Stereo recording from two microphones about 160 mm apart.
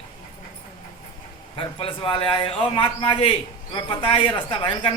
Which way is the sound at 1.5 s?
35° left (ahead or behind).